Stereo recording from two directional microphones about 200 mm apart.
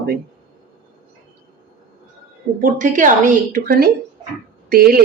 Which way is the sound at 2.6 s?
40° right (ahead or behind).